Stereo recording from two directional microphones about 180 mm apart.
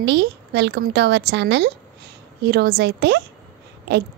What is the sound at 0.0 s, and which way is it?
A woman's voice, 75° right (ahead or behind).